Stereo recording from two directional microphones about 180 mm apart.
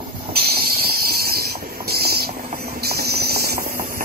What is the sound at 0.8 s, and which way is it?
Hiss, 55° right (ahead or behind).